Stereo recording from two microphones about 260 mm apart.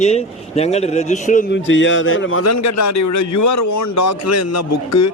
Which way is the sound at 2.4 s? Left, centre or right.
Left.